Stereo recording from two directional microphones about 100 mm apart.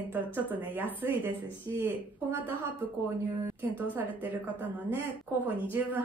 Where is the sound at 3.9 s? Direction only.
20° right (ahead or behind).